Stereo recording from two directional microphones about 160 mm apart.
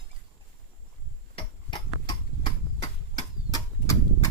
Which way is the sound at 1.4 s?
25° left (ahead or behind).